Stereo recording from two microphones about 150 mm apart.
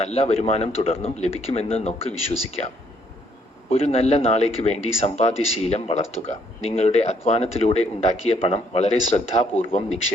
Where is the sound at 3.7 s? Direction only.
40° left (ahead or behind).